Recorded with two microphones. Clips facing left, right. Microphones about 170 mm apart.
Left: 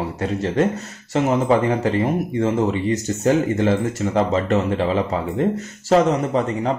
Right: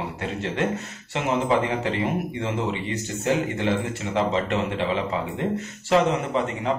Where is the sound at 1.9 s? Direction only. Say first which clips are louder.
Left 6 dB; 40° left (ahead or behind).